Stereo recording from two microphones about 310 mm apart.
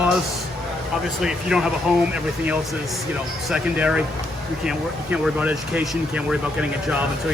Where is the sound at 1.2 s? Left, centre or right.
Centre.